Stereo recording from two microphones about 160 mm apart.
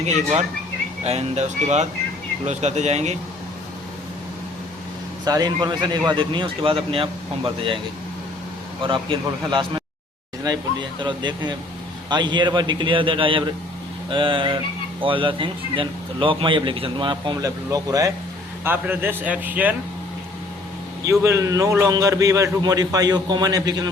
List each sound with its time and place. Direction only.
0.0 s speech: 50° right (ahead or behind)
5.2 s speech: 25° right (ahead or behind)
8.8 s a man's voice: 30° right (ahead or behind); by 19.7 s 10° right (ahead or behind)
21.0 s a man's voice: 20° right (ahead or behind)